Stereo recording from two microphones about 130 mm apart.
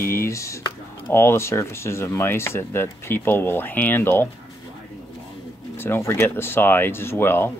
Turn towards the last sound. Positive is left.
turn(degrees=20)  # may be behind; listen again after turning